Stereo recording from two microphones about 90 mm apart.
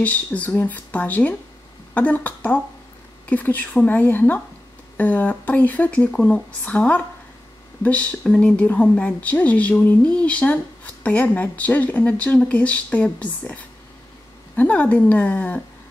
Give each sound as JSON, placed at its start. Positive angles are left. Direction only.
{"t": 0.0, "sound": "speech", "side_deg": 15}